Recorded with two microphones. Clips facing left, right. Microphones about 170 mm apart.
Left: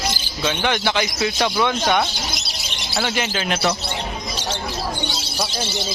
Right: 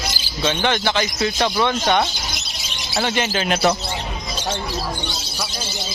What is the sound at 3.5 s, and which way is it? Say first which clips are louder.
Speech: right 4 dB; 45° right (ahead or behind).